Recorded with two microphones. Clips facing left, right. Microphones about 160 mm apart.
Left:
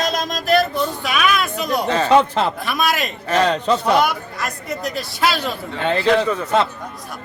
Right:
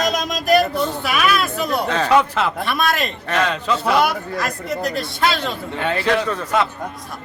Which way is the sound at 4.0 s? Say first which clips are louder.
Right 1 dB; centre (ahead or behind).